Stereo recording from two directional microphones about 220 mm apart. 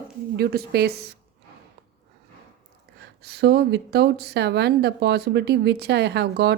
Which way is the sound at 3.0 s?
50° right (ahead or behind).